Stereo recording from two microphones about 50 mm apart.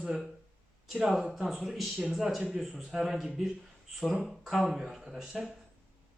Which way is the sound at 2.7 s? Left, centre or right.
Centre.